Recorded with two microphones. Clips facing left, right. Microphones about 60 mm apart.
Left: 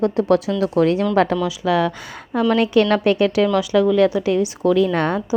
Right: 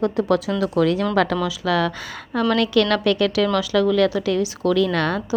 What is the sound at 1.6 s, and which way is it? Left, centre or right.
A woman's voice, centre.